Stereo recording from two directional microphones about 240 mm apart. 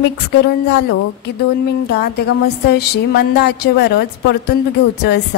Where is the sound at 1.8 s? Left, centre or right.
Left.